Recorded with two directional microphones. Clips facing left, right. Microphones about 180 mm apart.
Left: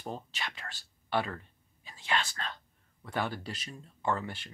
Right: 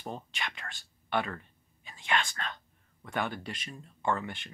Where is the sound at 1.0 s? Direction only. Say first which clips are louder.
Even; 30° left (ahead or behind).